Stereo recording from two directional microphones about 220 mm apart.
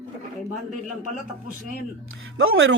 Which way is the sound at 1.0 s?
35° right (ahead or behind).